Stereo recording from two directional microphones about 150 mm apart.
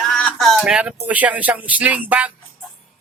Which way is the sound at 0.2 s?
Centre (ahead or behind).